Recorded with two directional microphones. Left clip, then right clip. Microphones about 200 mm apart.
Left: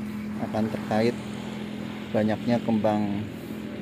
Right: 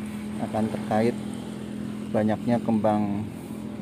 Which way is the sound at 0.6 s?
50° right (ahead or behind).